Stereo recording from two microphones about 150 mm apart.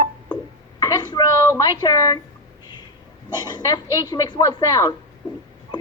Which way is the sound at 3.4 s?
30° left (ahead or behind).